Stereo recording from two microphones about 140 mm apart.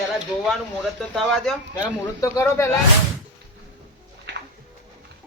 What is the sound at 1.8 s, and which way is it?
Speech, 20° left (ahead or behind).